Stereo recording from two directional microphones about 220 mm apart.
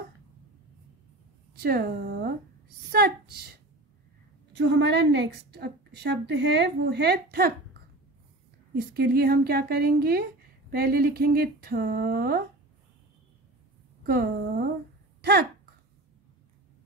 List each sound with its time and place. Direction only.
1.5 s a woman's voice: 45° right (ahead or behind)
4.6 s a woman's voice: 50° right (ahead or behind)
8.7 s a woman's voice: 45° right (ahead or behind)
14.0 s a woman's voice: 45° right (ahead or behind)